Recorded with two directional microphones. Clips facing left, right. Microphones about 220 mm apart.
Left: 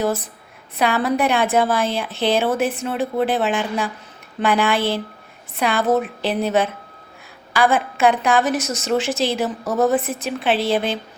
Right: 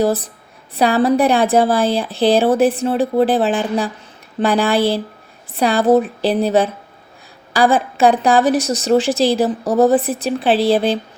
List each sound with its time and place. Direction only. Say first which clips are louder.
0.0 s a woman's voice: right 5 dB; 35° right (ahead or behind)